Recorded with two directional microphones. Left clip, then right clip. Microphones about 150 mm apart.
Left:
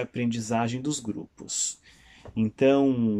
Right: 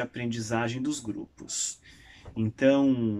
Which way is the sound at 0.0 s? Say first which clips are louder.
Left 3 dB; 25° left (ahead or behind).